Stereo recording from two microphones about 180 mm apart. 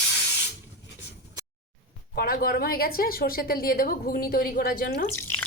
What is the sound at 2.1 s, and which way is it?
A woman's voice, 55° left (ahead or behind).